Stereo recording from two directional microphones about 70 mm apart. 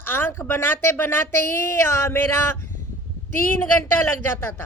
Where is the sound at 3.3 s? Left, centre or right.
Left.